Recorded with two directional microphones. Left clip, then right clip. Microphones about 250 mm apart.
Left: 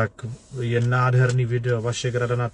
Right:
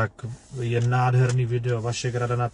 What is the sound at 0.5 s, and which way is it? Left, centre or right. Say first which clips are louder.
Speech: left 2 dB; centre.